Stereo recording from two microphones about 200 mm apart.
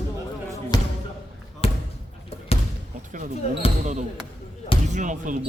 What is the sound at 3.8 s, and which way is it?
Speech, 35° right (ahead or behind).